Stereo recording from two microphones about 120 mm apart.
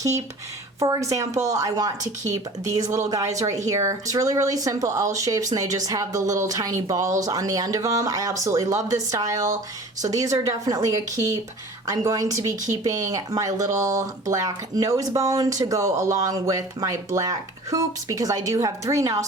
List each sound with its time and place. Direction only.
0.8 s speech: 25° right (ahead or behind)